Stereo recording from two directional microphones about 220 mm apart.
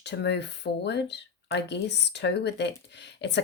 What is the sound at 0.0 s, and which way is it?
Speech, 50° left (ahead or behind).